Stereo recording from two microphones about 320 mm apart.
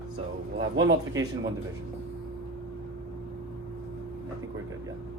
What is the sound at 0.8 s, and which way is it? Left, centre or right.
Speech, right.